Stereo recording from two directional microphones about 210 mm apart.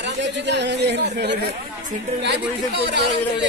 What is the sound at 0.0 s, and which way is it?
Speech, 55° right (ahead or behind).